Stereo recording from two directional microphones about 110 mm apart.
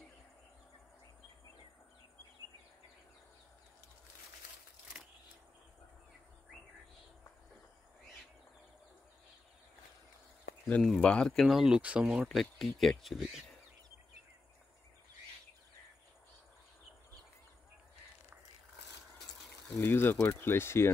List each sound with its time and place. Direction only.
10.8 s speech: 5° left (ahead or behind)
19.8 s speech: 20° left (ahead or behind)